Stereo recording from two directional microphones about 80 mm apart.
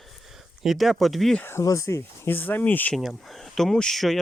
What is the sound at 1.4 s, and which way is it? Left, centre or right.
Speech, left.